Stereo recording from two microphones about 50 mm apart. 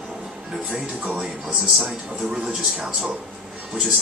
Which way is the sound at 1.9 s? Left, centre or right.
Centre.